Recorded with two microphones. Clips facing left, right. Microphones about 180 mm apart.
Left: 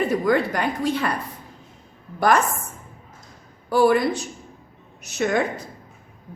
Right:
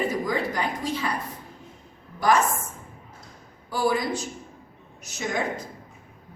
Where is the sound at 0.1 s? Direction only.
65° left (ahead or behind).